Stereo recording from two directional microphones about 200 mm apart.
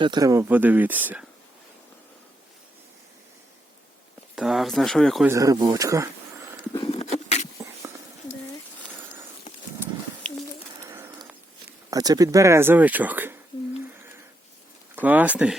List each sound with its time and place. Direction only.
0.0 s speech: 20° right (ahead or behind)
4.4 s speech: centre (ahead or behind)
5.2 s speech: 15° right (ahead or behind)
6.7 s a sound: 30° left (ahead or behind)
10.3 s bird: 5° left (ahead or behind)
10.8 s bird: 10° right (ahead or behind)
11.9 s speech: 20° right (ahead or behind)
14.9 s speech: 10° right (ahead or behind)